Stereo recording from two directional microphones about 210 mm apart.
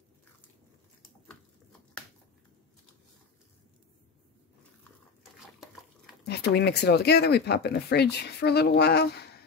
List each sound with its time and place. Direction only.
6.2 s speech: 50° left (ahead or behind)